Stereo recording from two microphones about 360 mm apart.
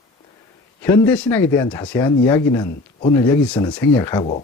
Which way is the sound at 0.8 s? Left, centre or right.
Centre.